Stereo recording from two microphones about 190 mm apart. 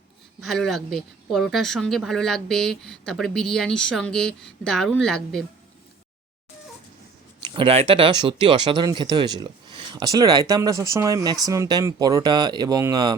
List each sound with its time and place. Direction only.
0.4 s speech: centre (ahead or behind)
7.4 s speech: 25° right (ahead or behind)